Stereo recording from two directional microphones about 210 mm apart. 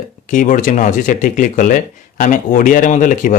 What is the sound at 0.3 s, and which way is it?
Speech, 40° left (ahead or behind).